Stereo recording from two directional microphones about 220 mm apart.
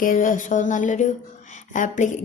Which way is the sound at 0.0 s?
40° left (ahead or behind).